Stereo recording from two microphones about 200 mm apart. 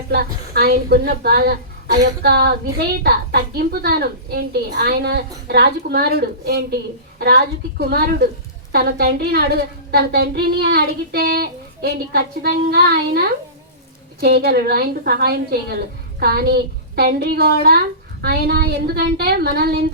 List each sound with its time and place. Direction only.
0.1 s a woman's voice: 50° right (ahead or behind)